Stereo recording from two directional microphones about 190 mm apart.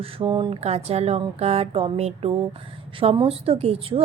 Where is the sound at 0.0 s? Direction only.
30° right (ahead or behind).